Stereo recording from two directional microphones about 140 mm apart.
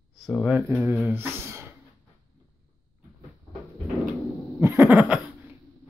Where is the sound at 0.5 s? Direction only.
10° right (ahead or behind).